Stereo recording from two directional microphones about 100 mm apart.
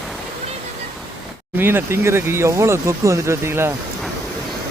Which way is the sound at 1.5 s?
20° right (ahead or behind).